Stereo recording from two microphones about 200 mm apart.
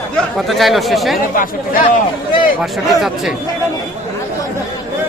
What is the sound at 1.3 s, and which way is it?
Speech, 45° left (ahead or behind).